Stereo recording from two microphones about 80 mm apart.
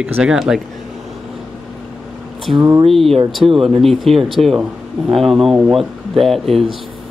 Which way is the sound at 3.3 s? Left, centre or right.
Centre.